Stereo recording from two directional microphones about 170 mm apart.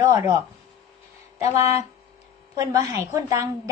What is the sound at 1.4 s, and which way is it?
A woman's voice, 20° right (ahead or behind).